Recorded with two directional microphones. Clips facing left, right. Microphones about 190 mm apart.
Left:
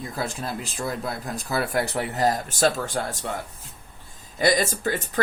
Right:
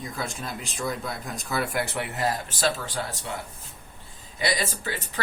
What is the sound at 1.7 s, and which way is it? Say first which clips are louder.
Speech: left 4 dB; 35° left (ahead or behind).